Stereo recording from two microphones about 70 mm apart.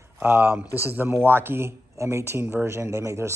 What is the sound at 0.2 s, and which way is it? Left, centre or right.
Speech, right.